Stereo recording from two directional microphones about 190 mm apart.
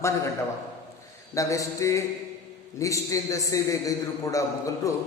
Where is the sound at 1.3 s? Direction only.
15° left (ahead or behind).